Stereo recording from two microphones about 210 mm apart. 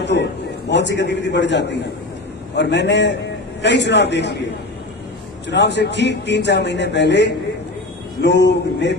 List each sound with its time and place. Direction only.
0.0 s a man's voice: 55° left (ahead or behind)
5.5 s a man's voice: 55° left (ahead or behind)